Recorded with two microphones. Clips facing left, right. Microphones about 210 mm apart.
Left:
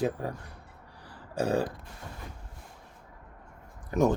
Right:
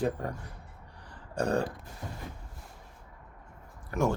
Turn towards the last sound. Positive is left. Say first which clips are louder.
# left 4 dB
turn(degrees=20)  # may be behind; listen again after turning